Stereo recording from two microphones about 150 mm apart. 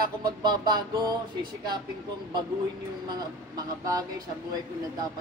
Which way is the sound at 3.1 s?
25° right (ahead or behind).